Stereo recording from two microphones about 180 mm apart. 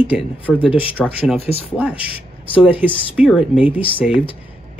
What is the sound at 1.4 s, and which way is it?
Speech, 35° left (ahead or behind).